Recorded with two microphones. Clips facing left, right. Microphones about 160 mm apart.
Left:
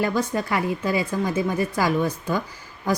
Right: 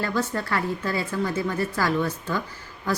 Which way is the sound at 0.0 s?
15° left (ahead or behind).